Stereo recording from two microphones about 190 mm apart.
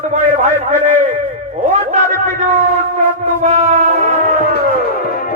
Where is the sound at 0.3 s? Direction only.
40° right (ahead or behind).